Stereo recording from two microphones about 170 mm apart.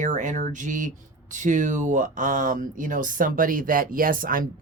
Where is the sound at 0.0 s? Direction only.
50° right (ahead or behind).